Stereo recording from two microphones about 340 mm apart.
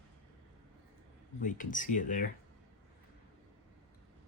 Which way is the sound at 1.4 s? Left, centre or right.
Left.